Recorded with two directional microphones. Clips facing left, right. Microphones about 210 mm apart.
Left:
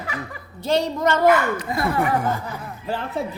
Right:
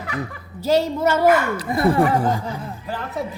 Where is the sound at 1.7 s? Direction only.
25° right (ahead or behind).